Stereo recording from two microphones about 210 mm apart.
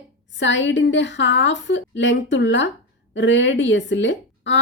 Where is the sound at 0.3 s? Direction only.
60° left (ahead or behind).